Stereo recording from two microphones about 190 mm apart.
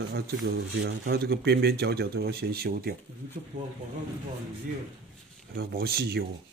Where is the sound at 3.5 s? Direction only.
40° right (ahead or behind).